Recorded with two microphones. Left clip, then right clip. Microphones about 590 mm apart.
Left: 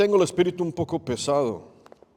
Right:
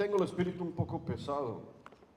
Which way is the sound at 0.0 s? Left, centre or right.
Left.